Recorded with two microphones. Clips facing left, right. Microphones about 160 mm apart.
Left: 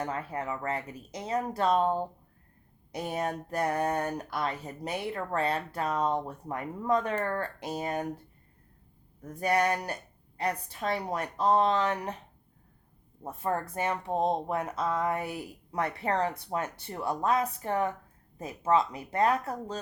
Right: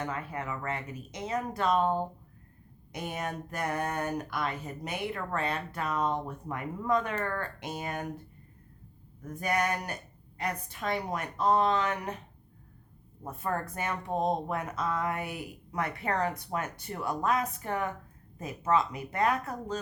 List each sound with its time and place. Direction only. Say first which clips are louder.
0.0 s speech: left 2 dB; 35° left (ahead or behind)
9.2 s speech: left 3 dB; 35° left (ahead or behind)
13.2 s speech: left 2 dB; 30° left (ahead or behind)